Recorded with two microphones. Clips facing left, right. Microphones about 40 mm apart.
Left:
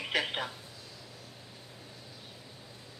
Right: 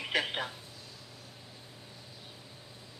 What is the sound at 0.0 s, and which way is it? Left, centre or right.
Speech, centre.